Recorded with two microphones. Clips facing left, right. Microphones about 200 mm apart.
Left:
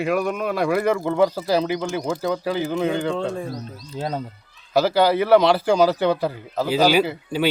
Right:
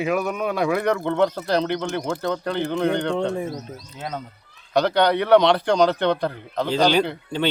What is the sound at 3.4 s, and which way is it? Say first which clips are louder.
Speech: right 2 dB; 20° right (ahead or behind).